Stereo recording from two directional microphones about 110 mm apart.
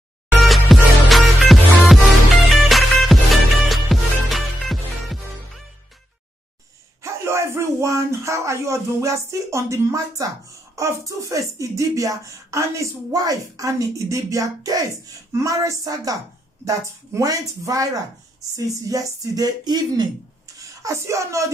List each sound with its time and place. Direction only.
0.4 s music: centre (ahead or behind)
7.0 s speech: 25° right (ahead or behind)
20.8 s speech: 30° right (ahead or behind)